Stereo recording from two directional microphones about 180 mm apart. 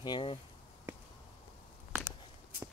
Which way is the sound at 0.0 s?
25° left (ahead or behind).